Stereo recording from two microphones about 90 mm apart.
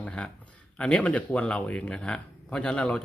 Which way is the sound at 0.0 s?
10° left (ahead or behind).